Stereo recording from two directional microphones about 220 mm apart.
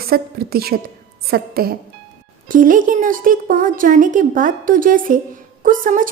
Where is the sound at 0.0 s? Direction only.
45° right (ahead or behind).